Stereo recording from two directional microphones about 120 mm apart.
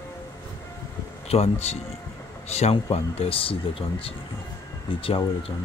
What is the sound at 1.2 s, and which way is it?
Speech, 60° left (ahead or behind).